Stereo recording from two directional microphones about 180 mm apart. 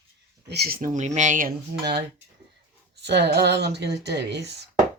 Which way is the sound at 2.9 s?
70° right (ahead or behind).